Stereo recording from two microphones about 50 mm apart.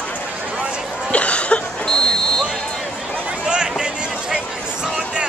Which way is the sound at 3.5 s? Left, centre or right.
Centre.